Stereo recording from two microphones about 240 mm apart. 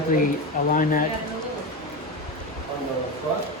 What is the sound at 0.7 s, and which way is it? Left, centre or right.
Speech, left.